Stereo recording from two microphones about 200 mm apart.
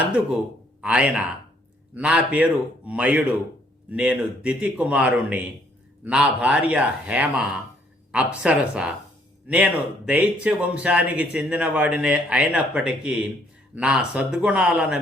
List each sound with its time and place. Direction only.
0.8 s speech: 5° right (ahead or behind)
10.1 s speech: 5° right (ahead or behind)